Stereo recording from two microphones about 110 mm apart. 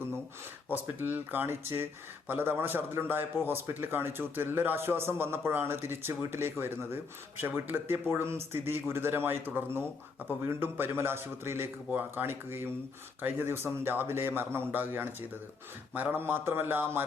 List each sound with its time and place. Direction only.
0.9 s speech: 15° right (ahead or behind)